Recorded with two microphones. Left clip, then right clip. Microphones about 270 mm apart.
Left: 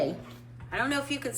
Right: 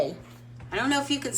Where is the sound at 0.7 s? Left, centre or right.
Centre.